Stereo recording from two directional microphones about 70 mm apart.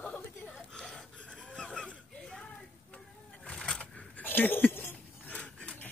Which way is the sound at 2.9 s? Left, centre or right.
Centre.